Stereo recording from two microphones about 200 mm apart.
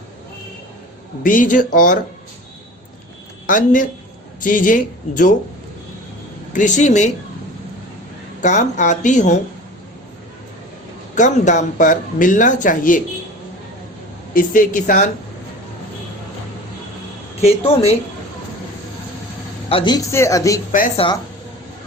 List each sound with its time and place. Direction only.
1.2 s speech: 40° left (ahead or behind)
3.4 s speech: 40° left (ahead or behind)
6.5 s speech: 40° left (ahead or behind)
8.4 s speech: 35° left (ahead or behind)
11.1 s speech: 40° left (ahead or behind)
14.3 s speech: 45° left (ahead or behind)
17.4 s speech: 30° left (ahead or behind)
19.7 s speech: 20° left (ahead or behind)
20.9 s speech: 25° left (ahead or behind)